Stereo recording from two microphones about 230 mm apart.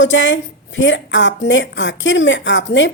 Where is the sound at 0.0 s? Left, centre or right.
Left.